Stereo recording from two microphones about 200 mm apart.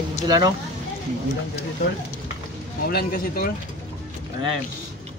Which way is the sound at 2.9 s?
50° left (ahead or behind).